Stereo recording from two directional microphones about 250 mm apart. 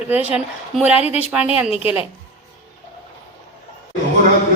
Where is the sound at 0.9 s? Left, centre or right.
Left.